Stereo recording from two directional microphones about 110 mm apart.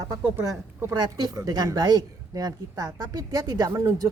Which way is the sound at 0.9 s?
35° right (ahead or behind).